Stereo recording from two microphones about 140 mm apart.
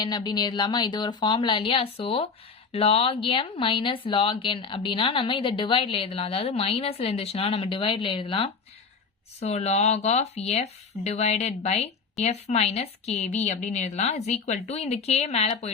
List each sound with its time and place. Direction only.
0.0 s speech: 30° left (ahead or behind)
9.4 s speech: 50° left (ahead or behind)